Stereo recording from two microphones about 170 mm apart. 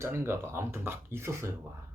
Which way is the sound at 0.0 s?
15° right (ahead or behind).